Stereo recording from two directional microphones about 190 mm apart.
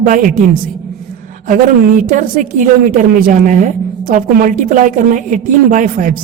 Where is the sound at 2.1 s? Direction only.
45° right (ahead or behind).